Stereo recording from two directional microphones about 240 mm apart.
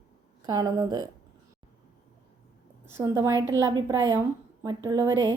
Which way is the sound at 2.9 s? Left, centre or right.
Centre.